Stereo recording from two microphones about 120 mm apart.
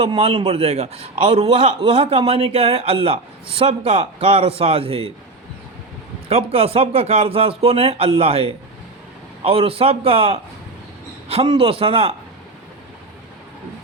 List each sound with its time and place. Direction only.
0.0 s a man's voice: 50° right (ahead or behind)
6.2 s a man's voice: 55° right (ahead or behind)
11.4 s a man's voice: 50° right (ahead or behind)